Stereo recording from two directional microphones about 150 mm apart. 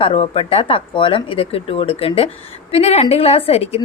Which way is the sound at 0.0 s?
40° left (ahead or behind).